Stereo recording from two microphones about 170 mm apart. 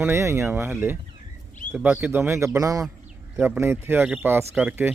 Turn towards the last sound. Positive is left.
turn(degrees=-10)  # may be behind; listen again after turning